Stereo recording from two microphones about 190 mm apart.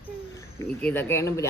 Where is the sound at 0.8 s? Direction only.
10° left (ahead or behind).